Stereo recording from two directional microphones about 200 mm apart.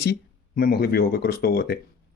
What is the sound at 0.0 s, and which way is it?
Speech, 50° left (ahead or behind).